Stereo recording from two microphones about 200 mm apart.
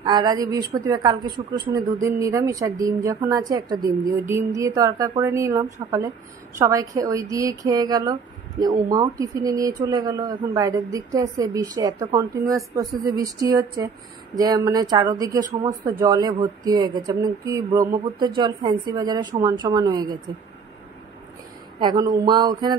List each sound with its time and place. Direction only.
0.0 s speech: 20° right (ahead or behind)
21.7 s speech: 20° right (ahead or behind)